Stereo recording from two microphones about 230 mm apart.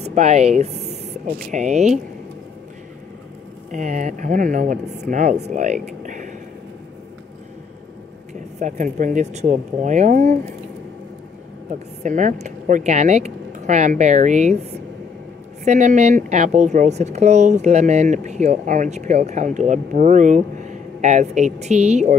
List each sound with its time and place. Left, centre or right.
0.0 s speech: right
3.7 s a woman's voice: right
5.5 s a sound: right
8.5 s a woman's voice: right
12.0 s a woman's voice: right